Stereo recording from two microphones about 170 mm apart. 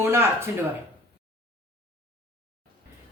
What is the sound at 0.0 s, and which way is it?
Speech, 15° right (ahead or behind).